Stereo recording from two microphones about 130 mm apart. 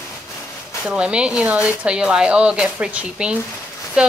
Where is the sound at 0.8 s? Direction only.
5° right (ahead or behind).